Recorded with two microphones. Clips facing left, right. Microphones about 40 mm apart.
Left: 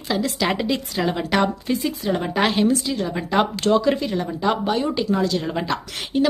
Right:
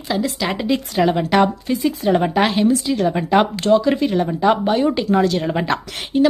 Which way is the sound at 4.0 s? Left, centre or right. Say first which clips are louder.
Right 6 dB; centre.